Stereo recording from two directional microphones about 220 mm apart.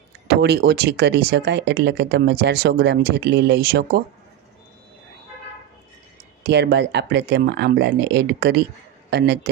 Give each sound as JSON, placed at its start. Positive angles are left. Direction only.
{"t": 0.3, "sound": "speech", "side_deg": -45}
{"t": 6.4, "sound": "speech", "side_deg": -50}